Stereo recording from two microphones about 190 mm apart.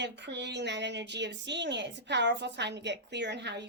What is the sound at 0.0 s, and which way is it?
Speech, 65° right (ahead or behind).